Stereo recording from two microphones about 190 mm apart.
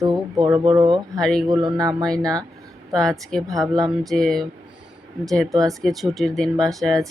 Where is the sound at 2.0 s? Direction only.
5° left (ahead or behind).